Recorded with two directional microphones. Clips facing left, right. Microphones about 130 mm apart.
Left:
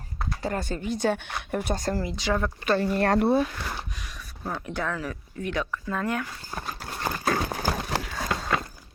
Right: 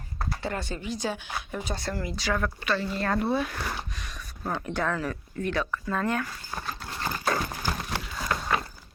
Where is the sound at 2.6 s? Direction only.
55° left (ahead or behind).